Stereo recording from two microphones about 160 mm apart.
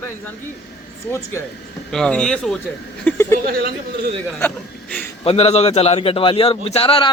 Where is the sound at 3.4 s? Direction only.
70° right (ahead or behind).